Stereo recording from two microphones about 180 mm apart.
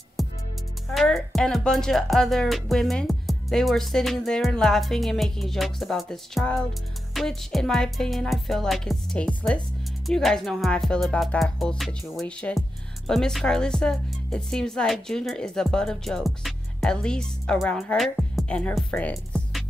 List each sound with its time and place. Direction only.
0.2 s music: centre (ahead or behind)